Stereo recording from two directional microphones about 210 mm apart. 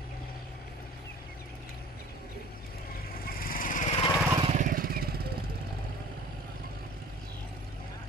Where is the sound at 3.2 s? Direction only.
45° left (ahead or behind).